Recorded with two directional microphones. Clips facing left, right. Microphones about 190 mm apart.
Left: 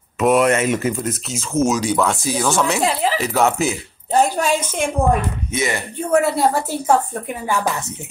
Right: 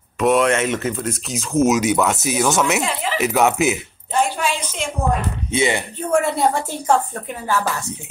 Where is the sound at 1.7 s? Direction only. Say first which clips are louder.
Right 1 dB; 20° right (ahead or behind).